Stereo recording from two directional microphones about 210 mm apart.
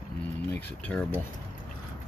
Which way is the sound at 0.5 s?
10° left (ahead or behind).